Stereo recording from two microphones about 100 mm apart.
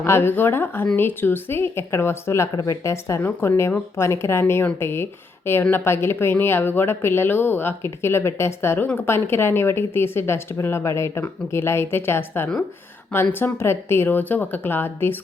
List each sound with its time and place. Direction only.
0.0 s a woman's voice: 25° left (ahead or behind)